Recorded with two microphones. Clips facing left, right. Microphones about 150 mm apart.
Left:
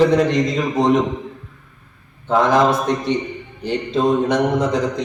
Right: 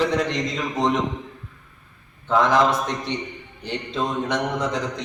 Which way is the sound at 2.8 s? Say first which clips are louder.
Left 8 dB; 5° left (ahead or behind).